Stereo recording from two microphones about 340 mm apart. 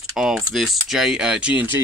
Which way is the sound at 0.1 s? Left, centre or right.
Centre.